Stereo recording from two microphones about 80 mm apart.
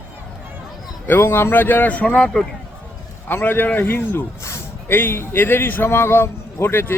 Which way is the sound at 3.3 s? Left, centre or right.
Left.